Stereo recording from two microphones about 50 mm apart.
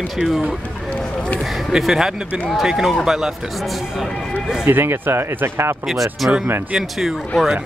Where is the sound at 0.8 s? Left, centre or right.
Left.